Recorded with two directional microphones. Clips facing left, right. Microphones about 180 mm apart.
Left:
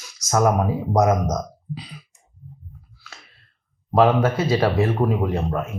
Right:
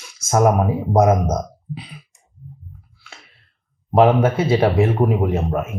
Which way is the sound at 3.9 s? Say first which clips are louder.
Right 3 dB; 25° right (ahead or behind).